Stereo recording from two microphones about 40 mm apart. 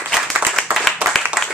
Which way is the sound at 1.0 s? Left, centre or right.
Right.